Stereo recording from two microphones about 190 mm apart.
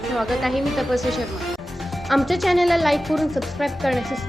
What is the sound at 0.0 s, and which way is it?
Speech, centre (ahead or behind).